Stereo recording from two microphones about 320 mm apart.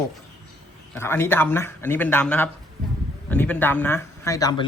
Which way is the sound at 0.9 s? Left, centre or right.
Centre.